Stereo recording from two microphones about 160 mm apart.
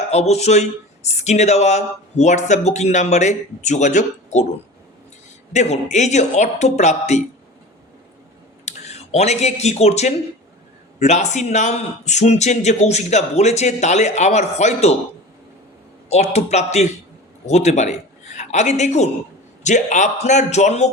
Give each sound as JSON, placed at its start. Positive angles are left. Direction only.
{"t": 0.1, "sound": "speech", "side_deg": 45}
{"t": 5.5, "sound": "speech", "side_deg": 45}
{"t": 8.6, "sound": "speech", "side_deg": 45}
{"t": 16.0, "sound": "a man's voice", "side_deg": 40}